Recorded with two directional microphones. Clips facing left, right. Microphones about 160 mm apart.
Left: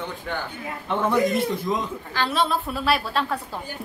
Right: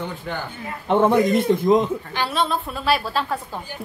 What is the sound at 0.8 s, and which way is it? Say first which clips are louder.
Speech: right 6 dB; 55° right (ahead or behind).